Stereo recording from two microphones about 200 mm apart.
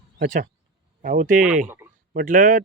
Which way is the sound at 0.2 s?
40° right (ahead or behind).